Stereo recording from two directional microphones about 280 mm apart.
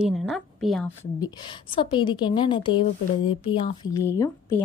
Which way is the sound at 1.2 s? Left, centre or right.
Centre.